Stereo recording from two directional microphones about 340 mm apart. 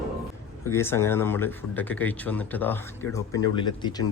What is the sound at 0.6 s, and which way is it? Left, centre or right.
Speech, centre.